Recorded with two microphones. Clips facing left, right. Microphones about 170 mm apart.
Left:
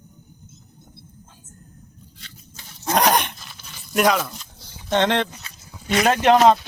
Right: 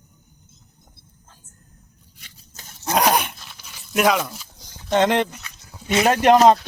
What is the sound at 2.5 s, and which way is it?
Goat, 45° right (ahead or behind).